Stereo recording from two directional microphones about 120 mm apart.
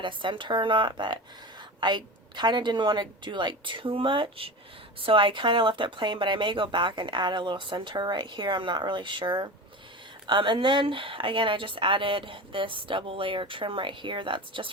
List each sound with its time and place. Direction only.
0.0 s a woman's voice: 40° right (ahead or behind)